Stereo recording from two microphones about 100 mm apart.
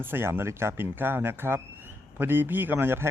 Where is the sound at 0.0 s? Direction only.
20° right (ahead or behind).